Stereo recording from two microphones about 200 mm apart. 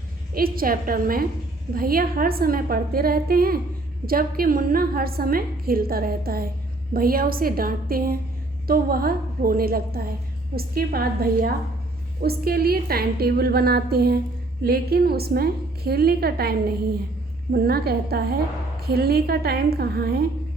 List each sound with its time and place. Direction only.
0.3 s a woman's voice: 45° right (ahead or behind)